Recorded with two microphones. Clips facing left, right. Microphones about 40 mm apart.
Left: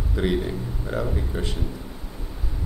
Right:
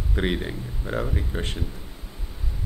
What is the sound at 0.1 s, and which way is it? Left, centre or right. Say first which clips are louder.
A man's voice: left 2 dB; right.